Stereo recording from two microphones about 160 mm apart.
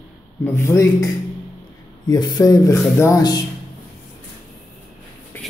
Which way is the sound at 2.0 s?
25° left (ahead or behind).